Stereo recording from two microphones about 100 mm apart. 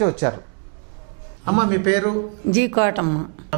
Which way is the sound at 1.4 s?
15° right (ahead or behind).